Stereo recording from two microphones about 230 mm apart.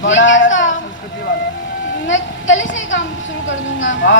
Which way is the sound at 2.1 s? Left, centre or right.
Left.